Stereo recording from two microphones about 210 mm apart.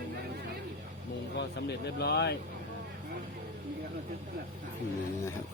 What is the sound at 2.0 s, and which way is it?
Speech, 55° left (ahead or behind).